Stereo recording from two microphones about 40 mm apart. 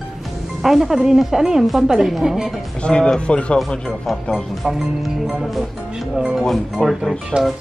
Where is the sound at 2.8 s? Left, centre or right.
Left.